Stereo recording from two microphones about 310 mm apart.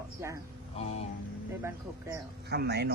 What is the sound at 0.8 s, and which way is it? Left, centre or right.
Speech, centre.